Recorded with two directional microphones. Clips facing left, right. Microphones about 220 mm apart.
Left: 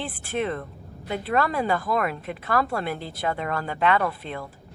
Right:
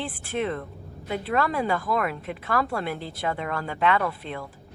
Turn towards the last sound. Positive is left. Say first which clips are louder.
# left 1 dB
turn(degrees=40)  # may be behind; listen again after turning